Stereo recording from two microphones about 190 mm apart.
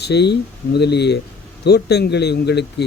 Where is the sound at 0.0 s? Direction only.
60° left (ahead or behind).